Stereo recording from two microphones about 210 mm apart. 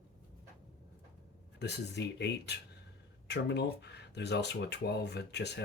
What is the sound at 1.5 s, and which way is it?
Speech, 50° left (ahead or behind).